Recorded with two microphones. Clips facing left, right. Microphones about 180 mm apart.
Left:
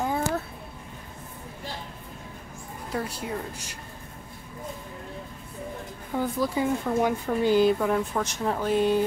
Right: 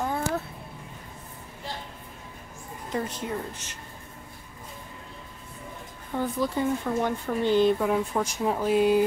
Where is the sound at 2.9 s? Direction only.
10° left (ahead or behind).